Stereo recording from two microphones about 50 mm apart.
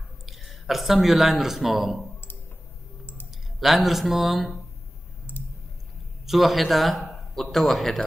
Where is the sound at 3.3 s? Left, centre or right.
Centre.